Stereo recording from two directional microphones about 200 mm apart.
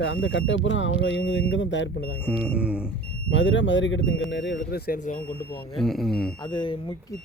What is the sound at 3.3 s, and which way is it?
Speech, 65° left (ahead or behind).